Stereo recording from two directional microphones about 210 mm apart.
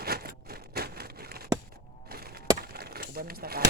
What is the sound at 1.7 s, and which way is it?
Skateboard, 45° right (ahead or behind).